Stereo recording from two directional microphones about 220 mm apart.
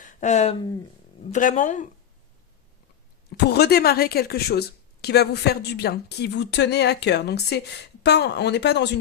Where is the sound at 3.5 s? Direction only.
45° left (ahead or behind).